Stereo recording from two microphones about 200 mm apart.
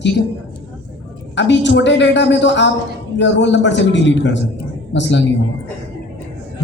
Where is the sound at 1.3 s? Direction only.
65° left (ahead or behind).